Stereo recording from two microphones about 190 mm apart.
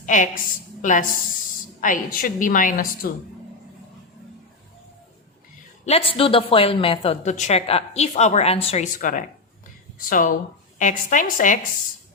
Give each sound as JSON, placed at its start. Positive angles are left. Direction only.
{"t": 0.0, "sound": "a woman's voice", "side_deg": 40}
{"t": 5.8, "sound": "a woman's voice", "side_deg": 30}